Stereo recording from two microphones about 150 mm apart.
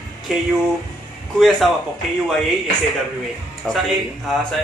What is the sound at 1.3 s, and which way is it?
Speech, centre (ahead or behind).